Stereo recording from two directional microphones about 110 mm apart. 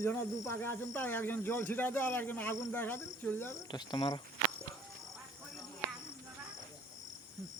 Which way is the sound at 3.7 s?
40° left (ahead or behind).